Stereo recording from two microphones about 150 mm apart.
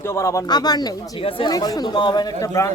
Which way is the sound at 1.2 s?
35° left (ahead or behind).